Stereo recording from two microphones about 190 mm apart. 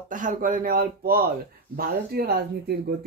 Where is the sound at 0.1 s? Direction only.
45° right (ahead or behind).